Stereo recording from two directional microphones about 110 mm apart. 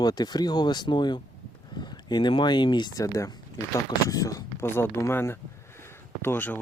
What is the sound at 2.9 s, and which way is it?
Speech, 30° left (ahead or behind).